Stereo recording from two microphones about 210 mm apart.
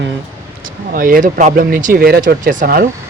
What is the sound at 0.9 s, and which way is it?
Speech, 40° right (ahead or behind).